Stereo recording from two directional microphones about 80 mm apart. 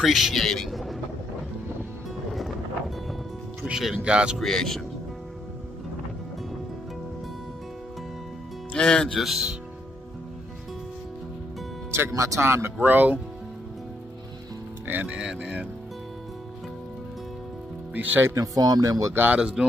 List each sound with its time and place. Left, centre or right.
0.0 s a man's voice: centre
3.6 s speech: centre
4.4 s a man's voice: centre
8.7 s a man's voice: centre
12.1 s speech: right
12.4 s speech: right
14.9 s speech: right
15.1 s speech: centre
17.9 s speech: right
18.3 s speech: right
19.1 s speech: right